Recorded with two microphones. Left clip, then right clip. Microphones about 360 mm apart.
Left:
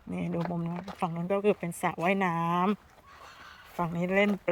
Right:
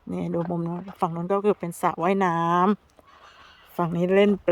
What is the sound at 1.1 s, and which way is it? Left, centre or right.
Speech, right.